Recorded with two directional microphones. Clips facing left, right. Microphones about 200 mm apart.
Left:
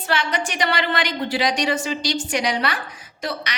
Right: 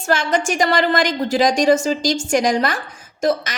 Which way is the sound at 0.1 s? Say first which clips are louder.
Right 6 dB; 45° right (ahead or behind).